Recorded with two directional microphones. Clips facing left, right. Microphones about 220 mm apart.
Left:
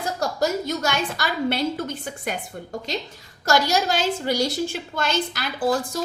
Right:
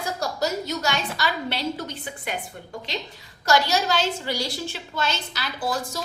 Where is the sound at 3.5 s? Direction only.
45° left (ahead or behind).